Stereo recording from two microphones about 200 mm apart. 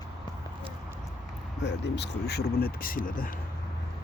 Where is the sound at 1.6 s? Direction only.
60° left (ahead or behind).